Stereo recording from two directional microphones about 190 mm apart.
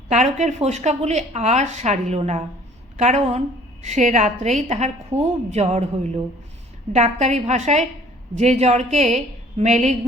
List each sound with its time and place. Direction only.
0.1 s a woman's voice: 40° right (ahead or behind)